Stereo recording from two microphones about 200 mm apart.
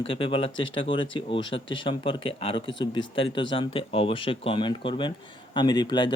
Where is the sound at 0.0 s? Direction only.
25° left (ahead or behind).